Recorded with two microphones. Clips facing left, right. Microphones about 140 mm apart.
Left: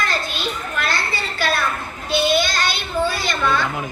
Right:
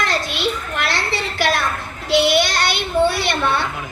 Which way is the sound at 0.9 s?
80° right.